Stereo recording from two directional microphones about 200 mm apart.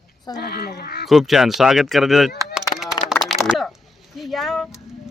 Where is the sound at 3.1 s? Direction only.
Centre (ahead or behind).